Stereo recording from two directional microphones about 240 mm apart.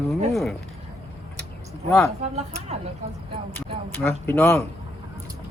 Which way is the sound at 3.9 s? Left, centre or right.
Centre.